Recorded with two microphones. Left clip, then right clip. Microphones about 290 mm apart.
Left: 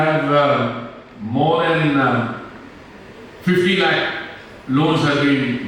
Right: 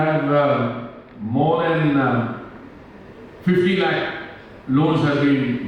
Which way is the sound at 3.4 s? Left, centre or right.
Centre.